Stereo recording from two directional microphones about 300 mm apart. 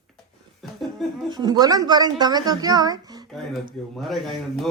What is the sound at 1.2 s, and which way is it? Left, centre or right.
A woman's voice, centre.